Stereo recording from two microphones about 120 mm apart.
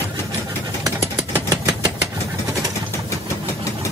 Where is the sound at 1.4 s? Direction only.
30° right (ahead or behind).